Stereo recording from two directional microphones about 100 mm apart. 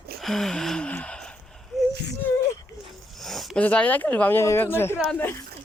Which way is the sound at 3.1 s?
Centre (ahead or behind).